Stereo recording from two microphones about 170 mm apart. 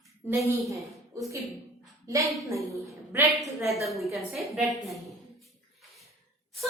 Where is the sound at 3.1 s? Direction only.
15° right (ahead or behind).